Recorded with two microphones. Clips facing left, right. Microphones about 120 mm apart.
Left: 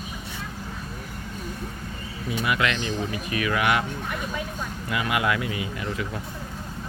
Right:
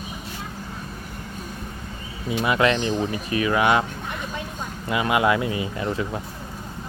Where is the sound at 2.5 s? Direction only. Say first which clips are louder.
Right 6 dB; 30° right (ahead or behind).